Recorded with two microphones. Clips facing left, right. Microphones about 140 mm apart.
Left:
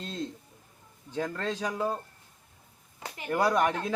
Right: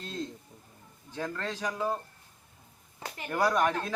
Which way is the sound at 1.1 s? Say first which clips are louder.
Left 3 dB; 20° left (ahead or behind).